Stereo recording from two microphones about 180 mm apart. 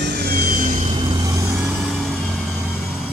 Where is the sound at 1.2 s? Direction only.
15° right (ahead or behind).